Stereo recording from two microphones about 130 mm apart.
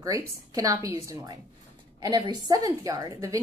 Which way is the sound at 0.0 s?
25° right (ahead or behind).